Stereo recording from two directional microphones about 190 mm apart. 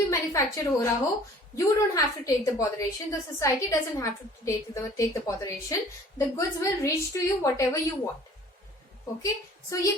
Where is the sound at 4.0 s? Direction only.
15° left (ahead or behind).